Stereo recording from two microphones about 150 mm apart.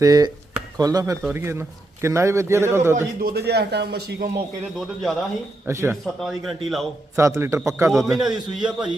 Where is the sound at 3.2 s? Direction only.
90° right.